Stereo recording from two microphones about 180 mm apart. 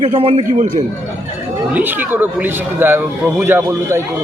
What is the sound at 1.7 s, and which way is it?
Speech, 10° right (ahead or behind).